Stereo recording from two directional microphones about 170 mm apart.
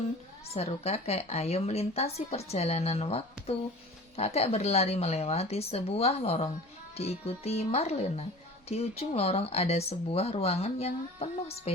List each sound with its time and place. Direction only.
0.5 s speech: 40° left (ahead or behind)